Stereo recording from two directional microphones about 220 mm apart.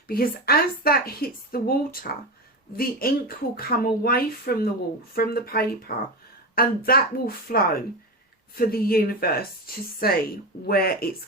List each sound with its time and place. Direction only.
0.1 s a woman's voice: 45° left (ahead or behind)